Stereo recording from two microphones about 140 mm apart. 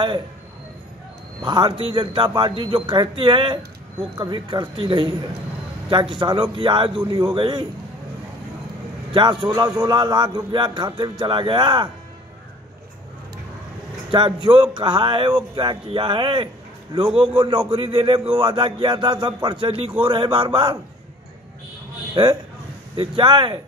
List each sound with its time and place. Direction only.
1.4 s speech: 35° right (ahead or behind)
9.1 s speech: 35° right (ahead or behind)
14.1 s speech: 35° right (ahead or behind)
22.1 s a man's voice: 35° right (ahead or behind)